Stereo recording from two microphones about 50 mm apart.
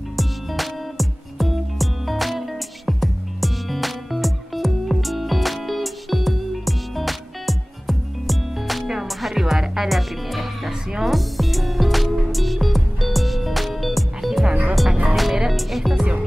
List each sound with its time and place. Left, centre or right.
0.2 s music: centre
14.5 s music: right
15.0 s music: centre